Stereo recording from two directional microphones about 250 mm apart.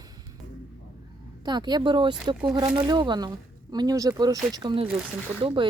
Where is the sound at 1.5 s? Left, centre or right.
Centre.